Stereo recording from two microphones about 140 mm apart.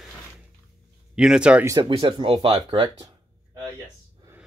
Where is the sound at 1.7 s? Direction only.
30° right (ahead or behind).